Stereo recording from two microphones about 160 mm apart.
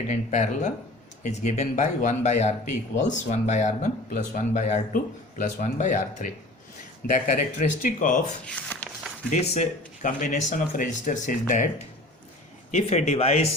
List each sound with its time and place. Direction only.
0.1 s speech: 50° left (ahead or behind)
8.6 s a sound: 5° left (ahead or behind)
9.3 s speech: 45° left (ahead or behind)
12.7 s speech: 45° left (ahead or behind)